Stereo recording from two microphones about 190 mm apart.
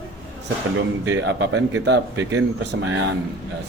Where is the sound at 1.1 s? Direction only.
65° right (ahead or behind).